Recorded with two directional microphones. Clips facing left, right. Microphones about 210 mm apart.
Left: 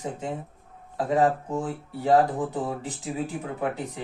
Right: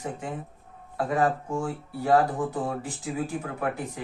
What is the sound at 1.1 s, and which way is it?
Speech, 20° left (ahead or behind).